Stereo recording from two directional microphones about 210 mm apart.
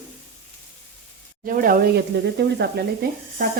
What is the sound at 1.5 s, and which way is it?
Speech, 40° right (ahead or behind).